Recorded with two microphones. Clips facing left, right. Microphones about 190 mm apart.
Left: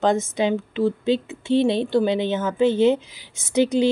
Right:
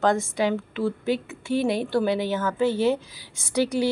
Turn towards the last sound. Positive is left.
turn(degrees=20)  # may be behind; listen again after turning